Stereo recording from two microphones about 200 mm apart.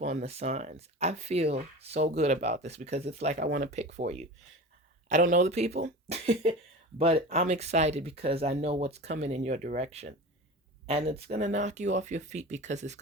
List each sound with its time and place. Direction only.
0.0 s speech: 35° right (ahead or behind)